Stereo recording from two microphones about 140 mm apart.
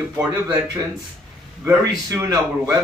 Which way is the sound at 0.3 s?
20° right (ahead or behind).